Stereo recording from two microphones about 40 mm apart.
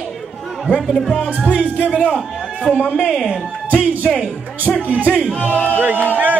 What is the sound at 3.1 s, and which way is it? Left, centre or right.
Speech, centre.